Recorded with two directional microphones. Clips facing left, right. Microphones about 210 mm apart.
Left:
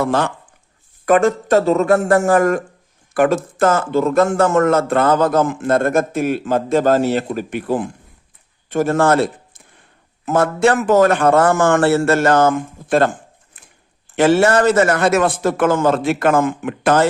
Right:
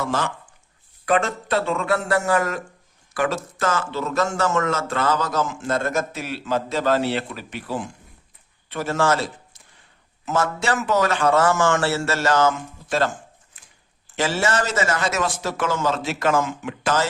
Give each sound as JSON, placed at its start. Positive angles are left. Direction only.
{"t": 0.0, "sound": "a man's voice", "side_deg": 60}
{"t": 1.0, "sound": "a man's voice", "side_deg": 45}